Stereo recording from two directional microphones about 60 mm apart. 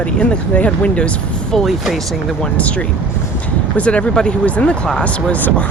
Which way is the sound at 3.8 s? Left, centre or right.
Centre.